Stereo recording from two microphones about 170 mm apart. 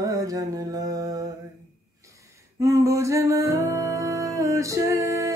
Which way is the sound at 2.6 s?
20° right (ahead or behind).